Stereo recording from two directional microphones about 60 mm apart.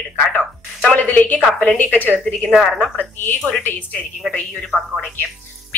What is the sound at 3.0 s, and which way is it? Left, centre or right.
A woman's voice, left.